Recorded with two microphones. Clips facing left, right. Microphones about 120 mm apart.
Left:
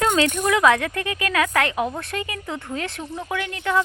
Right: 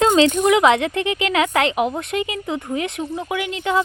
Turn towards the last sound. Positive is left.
turn(degrees=-20)  # may be behind; listen again after turning